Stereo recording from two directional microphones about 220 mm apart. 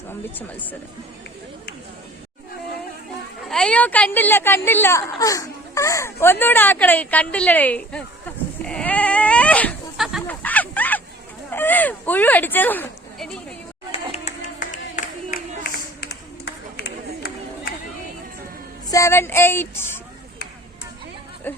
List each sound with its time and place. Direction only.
0.1 s a woman's voice: 10° left (ahead or behind)
3.5 s a woman's voice: 5° left (ahead or behind)
8.6 s dog: 5° left (ahead or behind)
11.5 s speech: 10° left (ahead or behind)
13.9 s clapping: 30° left (ahead or behind)
16.0 s a sound: 45° left (ahead or behind)
18.9 s female singing: 15° left (ahead or behind)
21.5 s a sound: 10° left (ahead or behind)